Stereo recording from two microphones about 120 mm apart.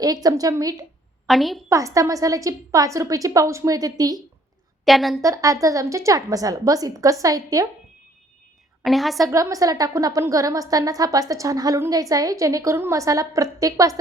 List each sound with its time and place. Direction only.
0.0 s a woman's voice: 30° right (ahead or behind)
1.3 s a woman's voice: centre (ahead or behind)
1.7 s a woman's voice: 25° right (ahead or behind)
4.9 s a woman's voice: centre (ahead or behind)
5.2 s a woman's voice: 25° right (ahead or behind)
8.8 s a woman's voice: centre (ahead or behind)
9.1 s a woman's voice: 30° right (ahead or behind)